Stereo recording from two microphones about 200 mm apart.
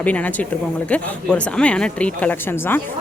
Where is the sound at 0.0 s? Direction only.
5° left (ahead or behind).